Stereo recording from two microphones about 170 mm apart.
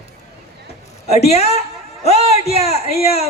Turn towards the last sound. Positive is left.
turn(degrees=35)  # may be behind; listen again after turning